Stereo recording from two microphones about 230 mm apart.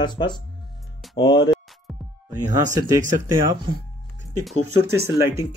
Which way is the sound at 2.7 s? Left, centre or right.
Centre.